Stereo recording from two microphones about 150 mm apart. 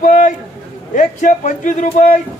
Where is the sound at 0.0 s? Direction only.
60° left (ahead or behind).